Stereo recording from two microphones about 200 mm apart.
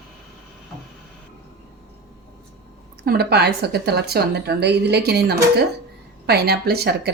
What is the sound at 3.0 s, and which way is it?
A woman's voice, 55° right (ahead or behind).